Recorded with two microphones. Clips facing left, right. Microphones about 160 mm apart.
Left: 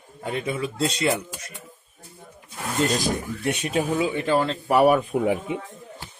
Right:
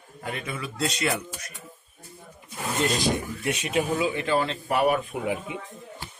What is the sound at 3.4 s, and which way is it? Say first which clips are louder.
Speech: left 2 dB; 35° left (ahead or behind).